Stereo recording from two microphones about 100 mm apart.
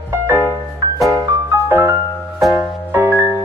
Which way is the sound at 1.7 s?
25° right (ahead or behind).